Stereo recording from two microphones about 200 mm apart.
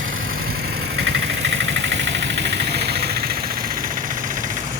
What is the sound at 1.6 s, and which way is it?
Vehicle, 65° right (ahead or behind).